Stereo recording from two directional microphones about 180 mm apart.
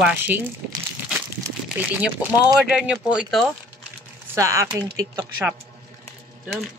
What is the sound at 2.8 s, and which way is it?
Speech, 5° right (ahead or behind).